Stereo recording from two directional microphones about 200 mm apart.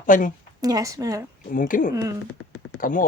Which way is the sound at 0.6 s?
20° right (ahead or behind).